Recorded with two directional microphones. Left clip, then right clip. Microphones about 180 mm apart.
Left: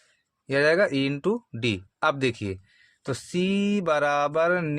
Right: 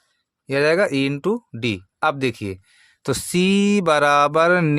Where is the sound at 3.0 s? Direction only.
45° right (ahead or behind).